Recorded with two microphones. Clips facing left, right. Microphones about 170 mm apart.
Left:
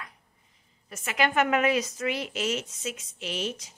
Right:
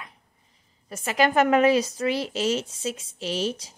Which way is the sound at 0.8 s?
35° right (ahead or behind).